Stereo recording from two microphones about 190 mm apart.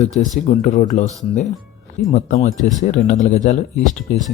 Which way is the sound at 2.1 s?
35° left (ahead or behind).